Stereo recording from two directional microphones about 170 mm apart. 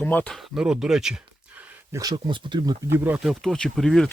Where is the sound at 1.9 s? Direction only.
20° right (ahead or behind).